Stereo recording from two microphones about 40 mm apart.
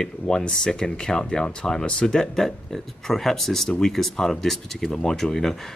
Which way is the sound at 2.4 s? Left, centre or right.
Centre.